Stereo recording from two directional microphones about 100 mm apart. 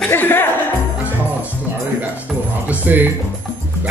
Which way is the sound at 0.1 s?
20° left (ahead or behind).